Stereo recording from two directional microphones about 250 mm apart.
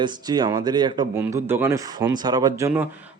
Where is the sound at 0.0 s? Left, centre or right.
Centre.